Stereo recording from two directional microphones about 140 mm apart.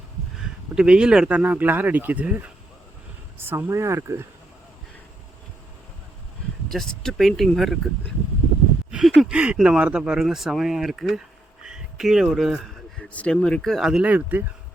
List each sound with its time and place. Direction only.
0.3 s speech: 5° right (ahead or behind); by 4.3 s 20° right (ahead or behind)
6.7 s speech: centre (ahead or behind)
8.9 s speech: 5° right (ahead or behind)
11.6 s a sound: 5° right (ahead or behind)
13.0 s speech: 5° left (ahead or behind); by 14.4 s 10° right (ahead or behind)